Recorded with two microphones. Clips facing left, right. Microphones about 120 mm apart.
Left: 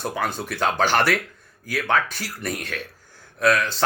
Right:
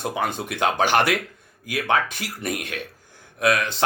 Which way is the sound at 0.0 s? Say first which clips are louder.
Right 1 dB; 20° right (ahead or behind).